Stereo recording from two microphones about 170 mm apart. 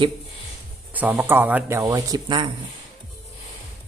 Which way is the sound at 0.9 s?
10° right (ahead or behind).